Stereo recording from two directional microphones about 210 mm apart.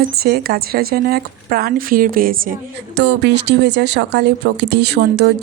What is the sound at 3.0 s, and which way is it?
A woman's voice, 55° right (ahead or behind).